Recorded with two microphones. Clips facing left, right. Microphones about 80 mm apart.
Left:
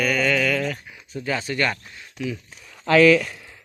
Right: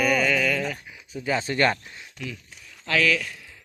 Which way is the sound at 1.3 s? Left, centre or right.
Right.